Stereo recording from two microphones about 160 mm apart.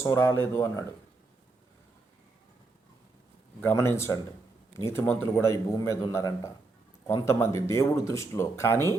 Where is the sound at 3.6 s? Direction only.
15° left (ahead or behind).